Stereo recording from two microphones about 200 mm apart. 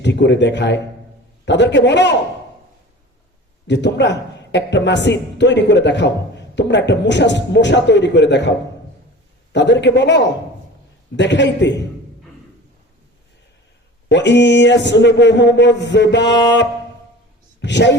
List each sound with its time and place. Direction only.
0.0 s a man's voice: 60° left (ahead or behind)
3.7 s a woman's voice: 60° left (ahead or behind)
14.1 s a woman's voice: 60° left (ahead or behind)